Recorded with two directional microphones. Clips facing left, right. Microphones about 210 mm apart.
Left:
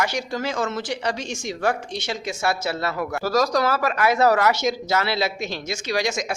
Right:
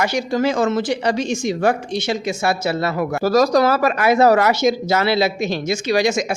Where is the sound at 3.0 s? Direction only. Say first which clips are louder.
Right 6 dB; 25° right (ahead or behind).